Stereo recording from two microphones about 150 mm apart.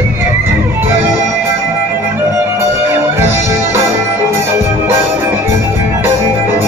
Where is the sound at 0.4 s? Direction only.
15° right (ahead or behind).